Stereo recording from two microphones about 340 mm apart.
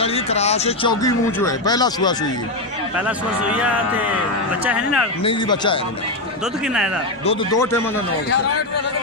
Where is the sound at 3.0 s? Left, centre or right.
Centre.